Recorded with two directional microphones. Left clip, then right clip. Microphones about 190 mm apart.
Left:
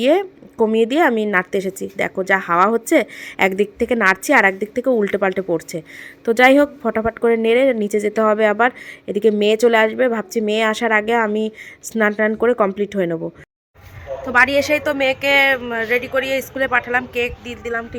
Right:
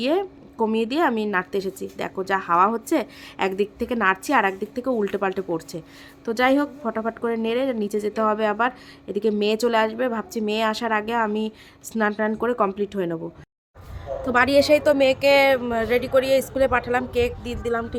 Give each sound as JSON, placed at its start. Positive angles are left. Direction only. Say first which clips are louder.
{"t": 0.0, "sound": "a woman's voice", "louder": "left 7 dB", "side_deg": 15}
{"t": 14.3, "sound": "a woman's voice", "louder": "left 2 dB", "side_deg": 0}